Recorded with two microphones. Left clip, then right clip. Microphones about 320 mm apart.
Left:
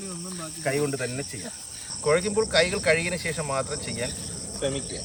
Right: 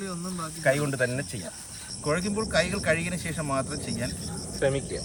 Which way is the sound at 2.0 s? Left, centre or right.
Centre.